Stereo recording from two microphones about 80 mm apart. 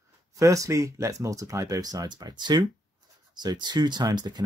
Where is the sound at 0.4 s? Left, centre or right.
Right.